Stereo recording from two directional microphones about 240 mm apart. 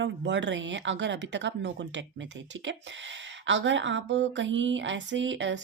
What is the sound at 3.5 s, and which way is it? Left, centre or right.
A woman's voice, right.